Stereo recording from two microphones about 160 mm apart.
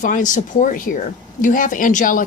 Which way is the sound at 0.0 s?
50° left (ahead or behind).